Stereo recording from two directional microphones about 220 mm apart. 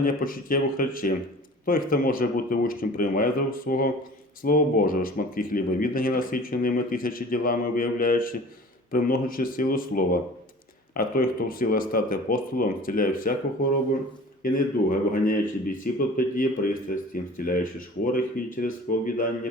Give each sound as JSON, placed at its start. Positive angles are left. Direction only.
{"t": 0.0, "sound": "speech", "side_deg": 40}
{"t": 14.4, "sound": "speech", "side_deg": 40}